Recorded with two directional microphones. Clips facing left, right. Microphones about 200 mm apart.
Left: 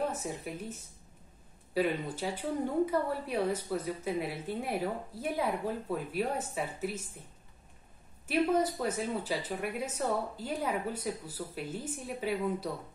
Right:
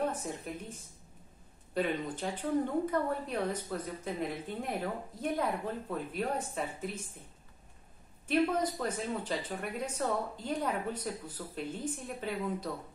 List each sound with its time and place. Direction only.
0.1 s a woman's voice: 5° left (ahead or behind)
8.3 s speech: 10° left (ahead or behind)